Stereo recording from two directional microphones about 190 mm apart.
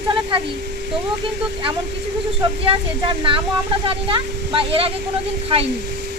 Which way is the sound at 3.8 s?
30° right (ahead or behind).